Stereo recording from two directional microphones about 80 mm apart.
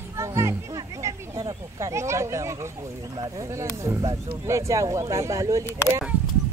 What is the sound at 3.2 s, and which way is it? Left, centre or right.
Speech, right.